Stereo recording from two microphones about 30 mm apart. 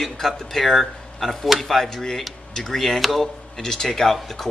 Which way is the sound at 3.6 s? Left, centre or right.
Centre.